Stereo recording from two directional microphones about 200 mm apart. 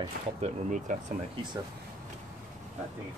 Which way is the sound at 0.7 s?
40° right (ahead or behind).